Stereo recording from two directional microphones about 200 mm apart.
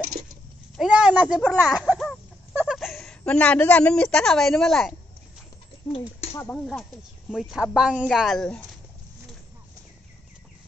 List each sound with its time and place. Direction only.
0.7 s a sound: 5° right (ahead or behind)
2.5 s a woman's voice: 5° right (ahead or behind)
5.9 s speech: 30° left (ahead or behind)
6.3 s speech: 10° left (ahead or behind)